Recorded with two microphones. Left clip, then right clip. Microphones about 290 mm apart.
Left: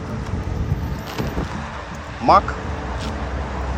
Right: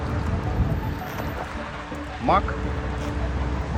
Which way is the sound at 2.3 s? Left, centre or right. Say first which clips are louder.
Left 7 dB; centre.